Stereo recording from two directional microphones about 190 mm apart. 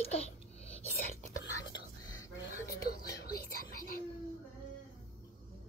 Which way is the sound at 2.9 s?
50° left (ahead or behind).